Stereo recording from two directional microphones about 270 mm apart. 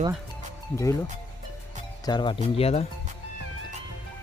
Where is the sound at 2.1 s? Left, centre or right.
Centre.